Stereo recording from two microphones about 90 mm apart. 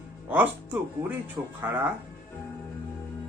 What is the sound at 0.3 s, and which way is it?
Speech, 20° right (ahead or behind).